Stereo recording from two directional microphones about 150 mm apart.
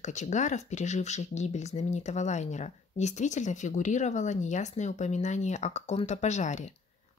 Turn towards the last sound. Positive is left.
turn(degrees=50)  # may be behind; listen again after turning